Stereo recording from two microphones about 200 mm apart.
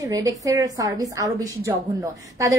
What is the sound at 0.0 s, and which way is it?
A woman's voice, 15° right (ahead or behind).